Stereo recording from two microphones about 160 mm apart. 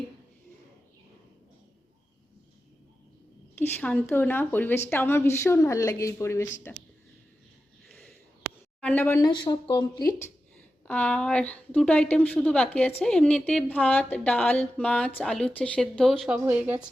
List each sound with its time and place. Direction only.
3.5 s a woman's voice: 10° left (ahead or behind)
7.9 s a sound: 5° left (ahead or behind)
8.8 s a woman's voice: 10° left (ahead or behind)
9.3 s speech: 25° left (ahead or behind)
10.8 s a woman's voice: 10° left (ahead or behind); by 16.8 s 10° right (ahead or behind)